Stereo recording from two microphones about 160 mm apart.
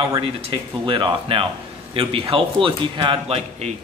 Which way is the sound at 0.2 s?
30° right (ahead or behind).